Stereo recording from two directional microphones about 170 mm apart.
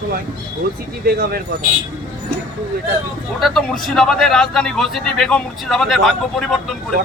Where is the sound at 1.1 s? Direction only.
65° right (ahead or behind).